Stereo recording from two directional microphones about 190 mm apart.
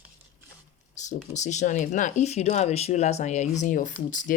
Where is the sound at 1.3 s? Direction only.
40° left (ahead or behind).